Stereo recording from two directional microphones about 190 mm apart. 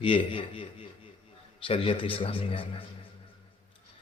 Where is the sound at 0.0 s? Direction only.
30° left (ahead or behind).